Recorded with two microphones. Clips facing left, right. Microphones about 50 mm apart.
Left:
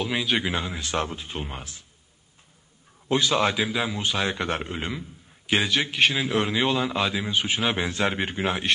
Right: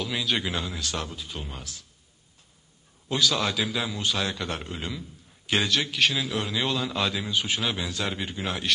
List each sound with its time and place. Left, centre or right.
0.0 s a man's voice: left
3.1 s a man's voice: left
5.5 s a man's voice: centre